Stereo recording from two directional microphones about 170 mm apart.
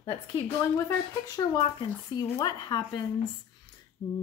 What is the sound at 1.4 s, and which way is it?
Speech, 25° left (ahead or behind).